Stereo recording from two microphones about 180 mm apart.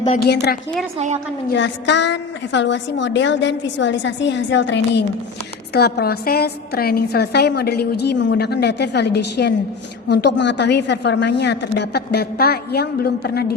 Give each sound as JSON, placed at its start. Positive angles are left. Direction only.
{"t": 0.9, "sound": "a woman's voice", "side_deg": -40}
{"t": 1.5, "sound": "a woman's voice", "side_deg": 75}
{"t": 5.7, "sound": "a woman's voice", "side_deg": 60}